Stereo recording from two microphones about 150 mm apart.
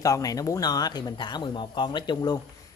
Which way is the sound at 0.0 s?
25° left (ahead or behind).